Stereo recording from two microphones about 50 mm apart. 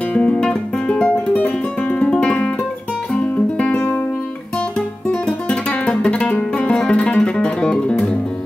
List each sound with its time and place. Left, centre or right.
0.1 s music: left
3.6 s music: centre
5.5 s music: left